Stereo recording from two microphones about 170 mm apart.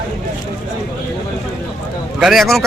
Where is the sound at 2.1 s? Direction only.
Centre (ahead or behind).